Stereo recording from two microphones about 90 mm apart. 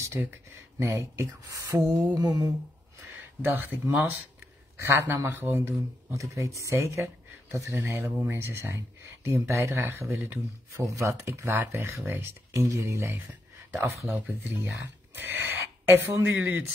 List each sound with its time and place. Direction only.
0.1 s speech: 25° right (ahead or behind)
2.1 s a sound: 45° right (ahead or behind)
3.4 s speech: 20° right (ahead or behind)
6.1 s speech: 35° right (ahead or behind); by 16.6 s 20° right (ahead or behind)